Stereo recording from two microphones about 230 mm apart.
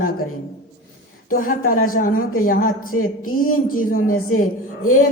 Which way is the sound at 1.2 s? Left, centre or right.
Left.